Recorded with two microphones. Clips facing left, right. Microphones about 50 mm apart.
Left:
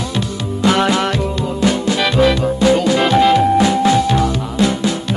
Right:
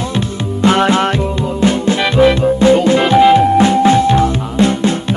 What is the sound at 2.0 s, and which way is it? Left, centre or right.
Music, centre.